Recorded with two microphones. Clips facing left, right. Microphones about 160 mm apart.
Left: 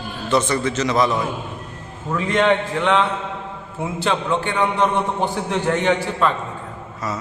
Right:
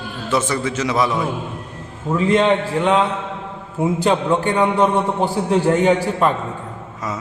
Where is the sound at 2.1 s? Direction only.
30° right (ahead or behind).